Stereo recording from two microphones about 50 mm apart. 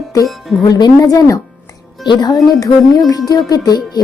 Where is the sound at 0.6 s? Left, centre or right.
Left.